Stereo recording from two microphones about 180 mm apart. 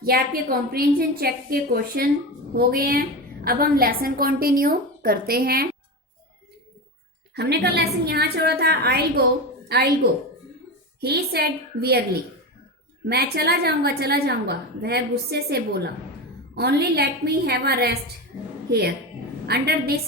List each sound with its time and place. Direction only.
0.0 s a woman's voice: 55° right (ahead or behind)
7.3 s a woman's voice: 65° right (ahead or behind)
13.1 s a woman's voice: 60° right (ahead or behind)
19.5 s a woman's voice: 60° right (ahead or behind)